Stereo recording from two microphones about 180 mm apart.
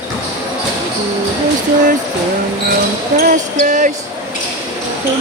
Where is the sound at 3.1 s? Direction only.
50° right (ahead or behind).